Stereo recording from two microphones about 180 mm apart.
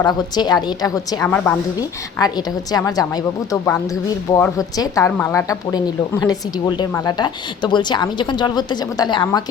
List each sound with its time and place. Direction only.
0.0 s a woman's voice: 25° left (ahead or behind)